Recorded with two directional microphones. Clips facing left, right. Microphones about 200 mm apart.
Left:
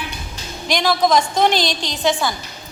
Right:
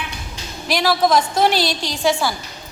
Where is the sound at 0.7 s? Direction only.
5° right (ahead or behind).